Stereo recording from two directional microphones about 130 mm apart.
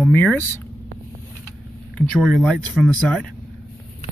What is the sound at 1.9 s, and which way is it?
Speech, centre (ahead or behind).